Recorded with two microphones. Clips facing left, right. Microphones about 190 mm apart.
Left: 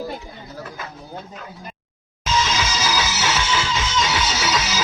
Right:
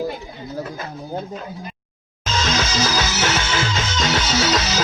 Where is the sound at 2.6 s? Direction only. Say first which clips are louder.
Right 2 dB; 50° right (ahead or behind).